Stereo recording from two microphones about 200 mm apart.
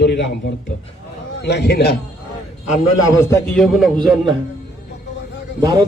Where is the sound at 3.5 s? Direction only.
Centre (ahead or behind).